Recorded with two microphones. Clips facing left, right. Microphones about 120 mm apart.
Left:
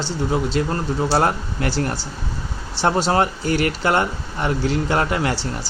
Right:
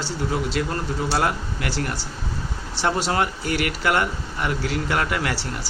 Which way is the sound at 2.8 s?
30° left (ahead or behind).